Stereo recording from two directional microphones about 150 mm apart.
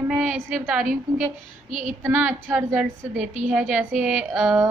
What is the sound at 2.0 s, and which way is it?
Speech, 10° right (ahead or behind).